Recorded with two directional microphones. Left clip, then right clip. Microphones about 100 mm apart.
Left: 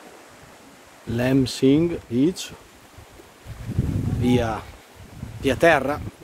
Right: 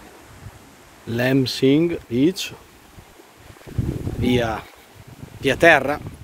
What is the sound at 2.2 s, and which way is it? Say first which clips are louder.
Speech: right 3 dB; 15° right (ahead or behind).